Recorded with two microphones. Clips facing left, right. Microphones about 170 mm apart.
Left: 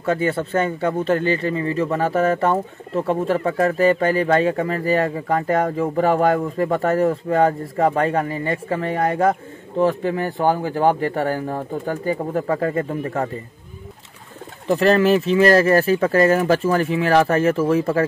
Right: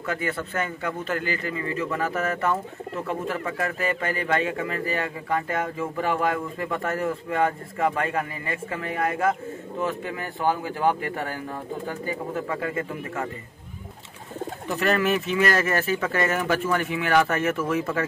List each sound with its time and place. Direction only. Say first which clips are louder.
0.0 s a man's voice: left 8 dB; 30° left (ahead or behind)
14.7 s a man's voice: left 8 dB; 30° left (ahead or behind)